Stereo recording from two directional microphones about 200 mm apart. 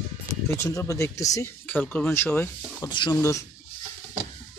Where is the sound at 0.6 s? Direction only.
15° left (ahead or behind).